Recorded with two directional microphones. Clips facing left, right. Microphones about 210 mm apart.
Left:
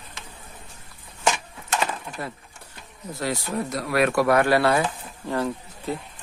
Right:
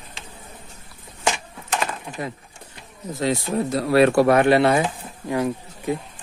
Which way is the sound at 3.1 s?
20° right (ahead or behind).